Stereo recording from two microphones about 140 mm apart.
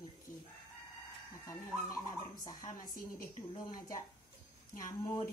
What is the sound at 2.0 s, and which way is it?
Speech, 25° left (ahead or behind).